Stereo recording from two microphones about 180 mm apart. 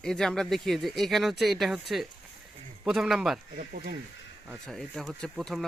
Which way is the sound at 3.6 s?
55° right (ahead or behind).